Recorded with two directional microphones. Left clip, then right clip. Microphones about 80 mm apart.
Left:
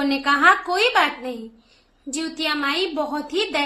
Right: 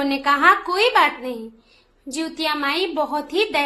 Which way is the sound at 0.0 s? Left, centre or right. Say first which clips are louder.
Even; right.